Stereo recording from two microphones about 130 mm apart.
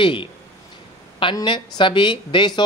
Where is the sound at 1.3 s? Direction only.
40° left (ahead or behind).